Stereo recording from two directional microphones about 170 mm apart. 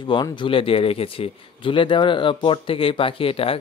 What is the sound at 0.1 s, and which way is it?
Speech, 30° left (ahead or behind).